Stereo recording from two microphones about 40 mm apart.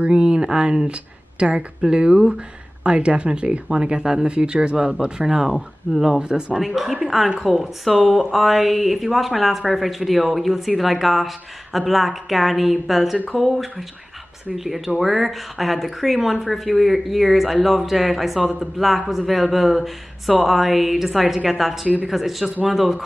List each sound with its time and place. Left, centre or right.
0.1 s speech: right
4.3 s speech: right
6.6 s speech: centre